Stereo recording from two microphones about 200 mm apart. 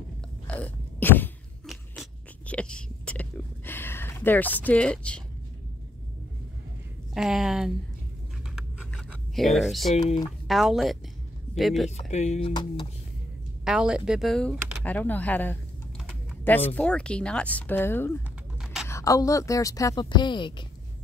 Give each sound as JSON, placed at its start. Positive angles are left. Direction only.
{"t": 0.5, "sound": "crunch", "side_deg": 5}
{"t": 7.2, "sound": "speech", "side_deg": 0}
{"t": 8.5, "sound": "computer keyboard", "side_deg": 0}
{"t": 9.9, "sound": "speech", "side_deg": 30}
{"t": 10.5, "sound": "speech", "side_deg": 0}
{"t": 12.0, "sound": "speech", "side_deg": 35}
{"t": 13.7, "sound": "a woman's voice", "side_deg": -5}
{"t": 18.6, "sound": "a sound", "side_deg": 0}
{"t": 18.9, "sound": "a woman's voice", "side_deg": 15}